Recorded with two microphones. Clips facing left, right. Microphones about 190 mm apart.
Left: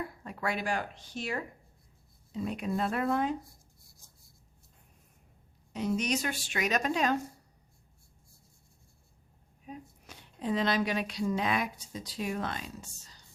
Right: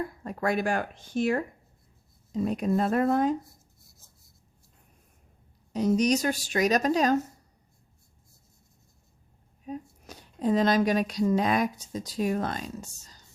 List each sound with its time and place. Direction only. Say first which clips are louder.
0.3 s a woman's voice: right 6 dB; 45° right (ahead or behind)
4.0 s writing: right 1 dB; 15° left (ahead or behind)
5.7 s a woman's voice: right 7 dB; 40° right (ahead or behind)
9.6 s speech: right 8 dB; 40° right (ahead or behind)